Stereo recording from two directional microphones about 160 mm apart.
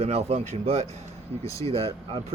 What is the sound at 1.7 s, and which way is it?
Speech, 35° right (ahead or behind).